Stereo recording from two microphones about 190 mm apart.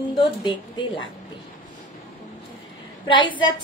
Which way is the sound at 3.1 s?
25° left (ahead or behind).